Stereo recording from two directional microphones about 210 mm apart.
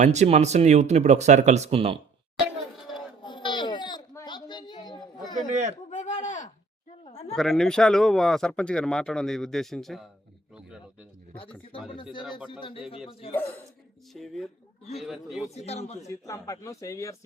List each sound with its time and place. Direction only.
0.0 s speech: 35° right (ahead or behind)
3.2 s a sound: 20° left (ahead or behind)
5.5 s chatter: 35° right (ahead or behind)
5.9 s a sound: 35° left (ahead or behind)
7.3 s a man's voice: centre (ahead or behind)
11.7 s speech: 25° left (ahead or behind)
14.1 s a man's voice: centre (ahead or behind)
15.4 s speech: 30° left (ahead or behind)
16.0 s a man's voice: 15° left (ahead or behind)